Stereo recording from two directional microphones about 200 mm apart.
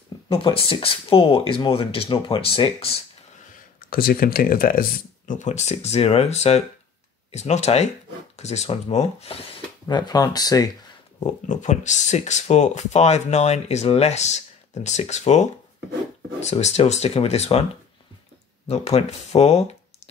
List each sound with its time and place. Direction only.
0.3 s speech: 25° left (ahead or behind)
3.9 s speech: 50° left (ahead or behind); by 9.4 s 30° left (ahead or behind)
9.8 s speech: 20° left (ahead or behind)
11.2 s speech: 35° left (ahead or behind)
18.7 s speech: 30° left (ahead or behind)